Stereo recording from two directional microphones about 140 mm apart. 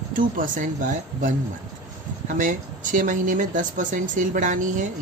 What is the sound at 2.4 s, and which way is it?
Speech, 70° right (ahead or behind).